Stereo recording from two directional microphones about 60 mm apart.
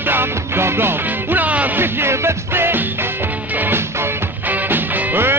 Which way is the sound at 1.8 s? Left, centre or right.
Right.